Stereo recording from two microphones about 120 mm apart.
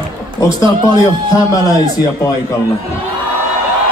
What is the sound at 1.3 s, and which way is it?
Speech, 30° left (ahead or behind).